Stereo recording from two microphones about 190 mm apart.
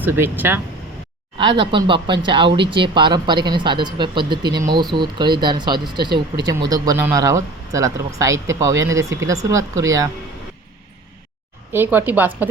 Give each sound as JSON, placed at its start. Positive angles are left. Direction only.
{"t": 0.0, "sound": "speech", "side_deg": -10}
{"t": 1.4, "sound": "speech", "side_deg": -25}
{"t": 11.7, "sound": "speech", "side_deg": -10}